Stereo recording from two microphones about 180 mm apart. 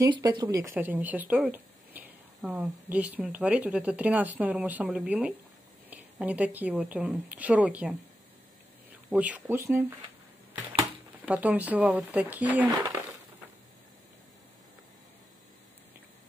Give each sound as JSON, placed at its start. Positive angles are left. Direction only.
{"t": 0.1, "sound": "speech", "side_deg": -25}
{"t": 9.1, "sound": "speech", "side_deg": -10}
{"t": 11.2, "sound": "speech", "side_deg": -10}
{"t": 12.6, "sound": "speech", "side_deg": -20}